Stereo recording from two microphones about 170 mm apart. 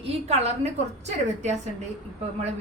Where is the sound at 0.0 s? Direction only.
40° right (ahead or behind).